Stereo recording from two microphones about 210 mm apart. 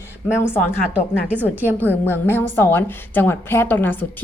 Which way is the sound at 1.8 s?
10° left (ahead or behind).